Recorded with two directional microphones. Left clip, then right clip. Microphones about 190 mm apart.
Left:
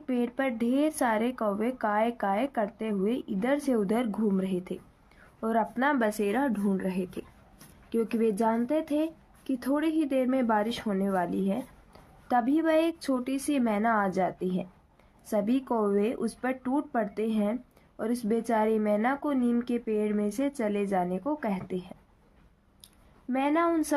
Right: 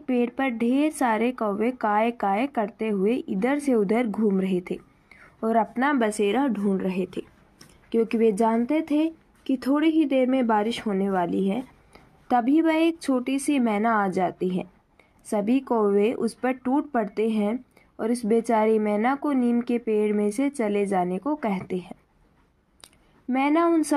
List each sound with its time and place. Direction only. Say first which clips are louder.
0.0 s a woman's voice: right 5 dB; 10° right (ahead or behind)
23.3 s a woman's voice: right 5 dB; 20° right (ahead or behind)